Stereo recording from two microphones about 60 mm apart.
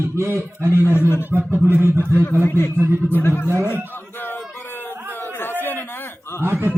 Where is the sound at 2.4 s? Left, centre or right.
Left.